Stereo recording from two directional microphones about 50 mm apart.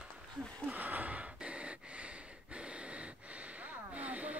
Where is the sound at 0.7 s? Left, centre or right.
Right.